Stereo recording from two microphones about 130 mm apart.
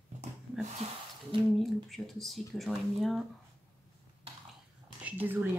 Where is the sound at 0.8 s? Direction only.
55° right (ahead or behind).